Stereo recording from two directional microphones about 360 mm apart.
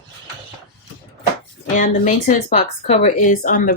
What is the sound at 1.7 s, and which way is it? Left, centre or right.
A woman's voice, centre.